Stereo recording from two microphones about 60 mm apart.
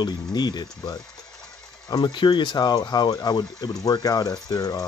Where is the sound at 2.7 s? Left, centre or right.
Left.